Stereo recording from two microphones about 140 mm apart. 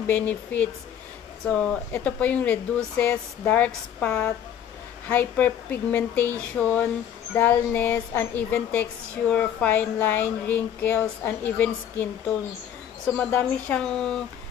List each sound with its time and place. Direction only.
0.0 s speech: 10° left (ahead or behind)